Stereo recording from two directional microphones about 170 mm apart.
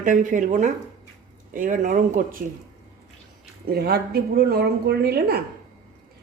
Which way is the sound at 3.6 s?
70° right (ahead or behind).